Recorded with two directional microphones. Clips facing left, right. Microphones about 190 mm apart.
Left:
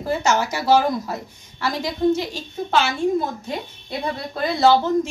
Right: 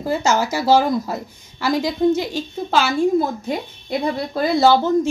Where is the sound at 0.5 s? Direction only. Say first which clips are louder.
Right 3 dB; 30° right (ahead or behind).